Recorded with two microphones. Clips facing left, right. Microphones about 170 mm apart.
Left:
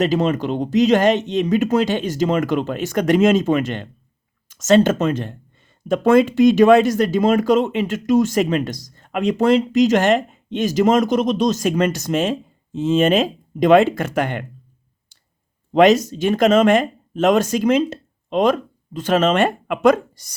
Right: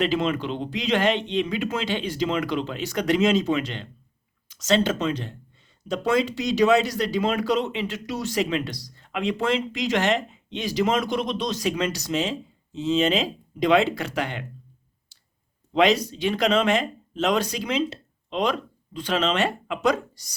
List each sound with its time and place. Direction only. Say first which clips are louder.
0.0 s speech: left 5 dB; 40° left (ahead or behind)
15.7 s speech: left 7 dB; 45° left (ahead or behind)